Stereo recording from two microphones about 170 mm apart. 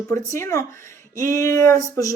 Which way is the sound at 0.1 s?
15° left (ahead or behind).